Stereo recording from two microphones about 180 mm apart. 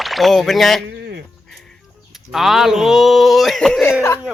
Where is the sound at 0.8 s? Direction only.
65° right (ahead or behind).